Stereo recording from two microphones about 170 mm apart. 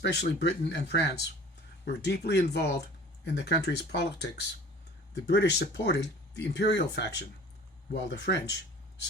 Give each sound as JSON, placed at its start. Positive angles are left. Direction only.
{"t": 0.0, "sound": "speech", "side_deg": 80}